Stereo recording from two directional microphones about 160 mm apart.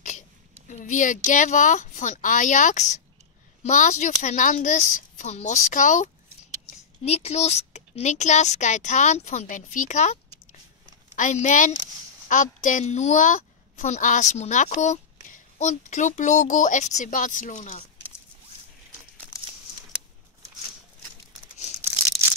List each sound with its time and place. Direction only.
0.7 s speech: 55° left (ahead or behind)
7.1 s speech: 40° left (ahead or behind)
11.1 s speech: 50° left (ahead or behind)
21.8 s a sound: 20° right (ahead or behind)